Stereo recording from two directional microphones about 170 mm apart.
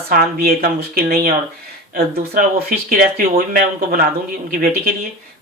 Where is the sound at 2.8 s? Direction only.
55° right (ahead or behind).